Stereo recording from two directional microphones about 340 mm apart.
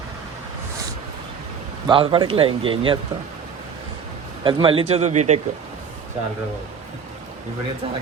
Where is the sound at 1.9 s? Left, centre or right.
Centre.